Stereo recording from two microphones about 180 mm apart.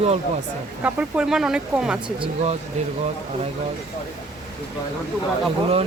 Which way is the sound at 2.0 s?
35° right (ahead or behind).